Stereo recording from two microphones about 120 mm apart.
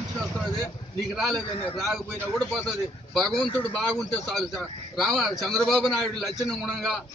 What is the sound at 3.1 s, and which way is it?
Speech, 5° left (ahead or behind).